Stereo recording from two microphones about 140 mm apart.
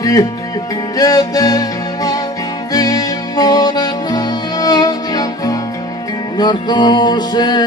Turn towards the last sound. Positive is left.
turn(degrees=30)  # may be behind; listen again after turning